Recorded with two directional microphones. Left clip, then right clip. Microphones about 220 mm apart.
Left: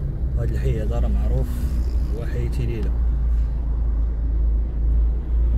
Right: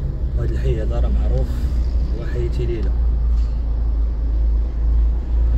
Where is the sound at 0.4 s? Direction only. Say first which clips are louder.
Right 3 dB; 30° left (ahead or behind).